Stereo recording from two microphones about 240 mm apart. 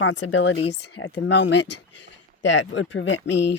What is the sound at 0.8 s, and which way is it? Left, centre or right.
Speech, left.